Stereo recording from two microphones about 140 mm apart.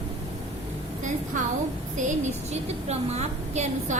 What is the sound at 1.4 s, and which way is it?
Speech, 65° right (ahead or behind).